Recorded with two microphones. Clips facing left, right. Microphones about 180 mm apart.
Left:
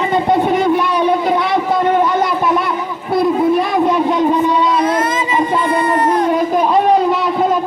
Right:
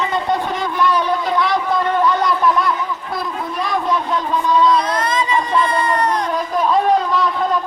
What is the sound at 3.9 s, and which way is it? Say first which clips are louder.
Vehicle: left 6 dB; 15° left (ahead or behind).